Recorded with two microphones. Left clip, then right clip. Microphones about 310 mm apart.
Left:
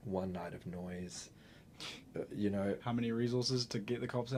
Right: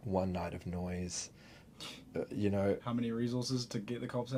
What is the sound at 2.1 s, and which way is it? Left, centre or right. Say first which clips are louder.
Speech: right 3 dB; right.